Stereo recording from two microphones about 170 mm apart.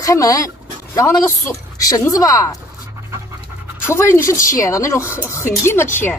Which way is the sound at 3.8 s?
15° left (ahead or behind).